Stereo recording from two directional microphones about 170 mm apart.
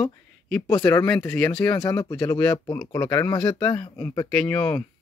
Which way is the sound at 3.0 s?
15° left (ahead or behind).